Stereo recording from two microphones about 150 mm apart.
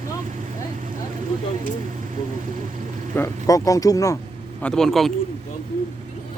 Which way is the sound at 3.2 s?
25° left (ahead or behind).